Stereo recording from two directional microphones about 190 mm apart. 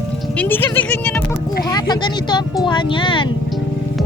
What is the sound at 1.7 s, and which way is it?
Speech, 20° left (ahead or behind).